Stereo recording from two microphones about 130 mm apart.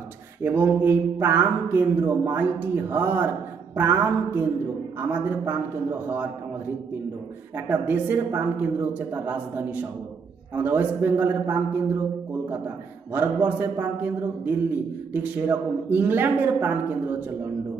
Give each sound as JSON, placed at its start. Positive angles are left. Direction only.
{"t": 0.4, "sound": "a man's voice", "side_deg": -15}
{"t": 7.5, "sound": "a man's voice", "side_deg": -15}